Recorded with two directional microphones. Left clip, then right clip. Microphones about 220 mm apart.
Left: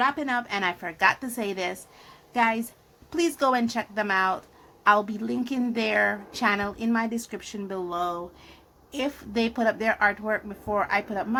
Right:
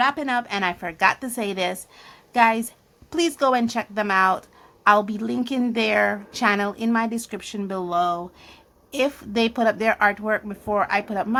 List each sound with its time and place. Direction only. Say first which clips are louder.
0.0 s a woman's voice: right 3 dB; 20° right (ahead or behind)